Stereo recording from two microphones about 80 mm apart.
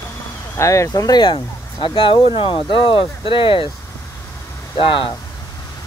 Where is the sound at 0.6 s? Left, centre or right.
Left.